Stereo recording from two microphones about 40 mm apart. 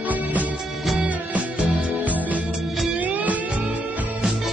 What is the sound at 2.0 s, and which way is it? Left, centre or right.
Music, right.